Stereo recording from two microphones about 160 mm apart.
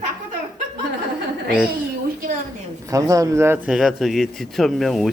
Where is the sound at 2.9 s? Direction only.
20° right (ahead or behind).